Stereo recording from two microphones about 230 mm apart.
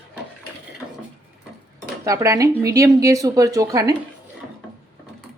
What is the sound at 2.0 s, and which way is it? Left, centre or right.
A woman's voice, centre.